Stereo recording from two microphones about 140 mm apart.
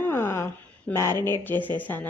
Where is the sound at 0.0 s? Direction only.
15° left (ahead or behind).